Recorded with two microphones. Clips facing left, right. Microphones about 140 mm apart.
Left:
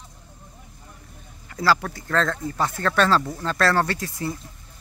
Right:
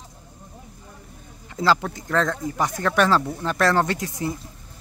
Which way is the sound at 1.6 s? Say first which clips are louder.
Right 1 dB; 20° right (ahead or behind).